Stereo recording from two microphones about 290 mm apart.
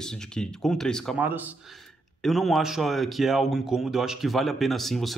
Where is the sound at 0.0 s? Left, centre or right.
Centre.